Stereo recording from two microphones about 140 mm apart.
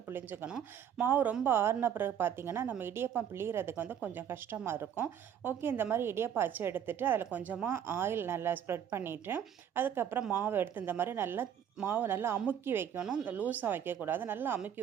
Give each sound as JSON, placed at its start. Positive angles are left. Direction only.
{"t": 0.1, "sound": "a woman's voice", "side_deg": -15}